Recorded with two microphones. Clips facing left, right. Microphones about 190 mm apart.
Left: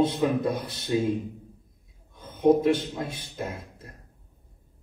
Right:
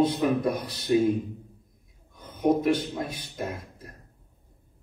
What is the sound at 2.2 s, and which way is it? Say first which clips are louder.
Speech: left 3 dB; 25° left (ahead or behind).